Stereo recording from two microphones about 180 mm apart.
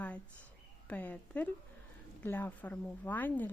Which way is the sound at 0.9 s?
10° left (ahead or behind).